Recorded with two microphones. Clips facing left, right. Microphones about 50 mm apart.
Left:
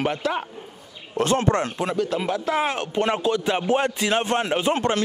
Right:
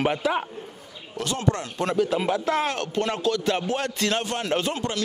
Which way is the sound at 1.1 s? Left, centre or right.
Left.